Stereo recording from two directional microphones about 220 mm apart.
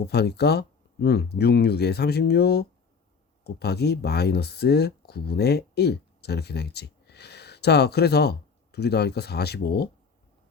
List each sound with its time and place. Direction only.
0.1 s speech: 45° left (ahead or behind)